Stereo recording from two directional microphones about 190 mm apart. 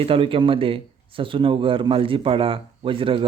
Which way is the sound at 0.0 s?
30° right (ahead or behind).